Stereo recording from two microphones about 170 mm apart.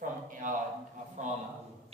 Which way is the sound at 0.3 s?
50° right (ahead or behind).